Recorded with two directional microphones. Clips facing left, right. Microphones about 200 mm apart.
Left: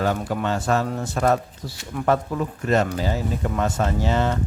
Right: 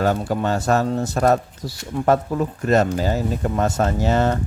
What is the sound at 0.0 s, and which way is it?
Speech, 40° right (ahead or behind).